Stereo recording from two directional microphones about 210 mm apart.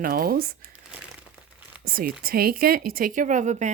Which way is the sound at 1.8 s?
45° right (ahead or behind).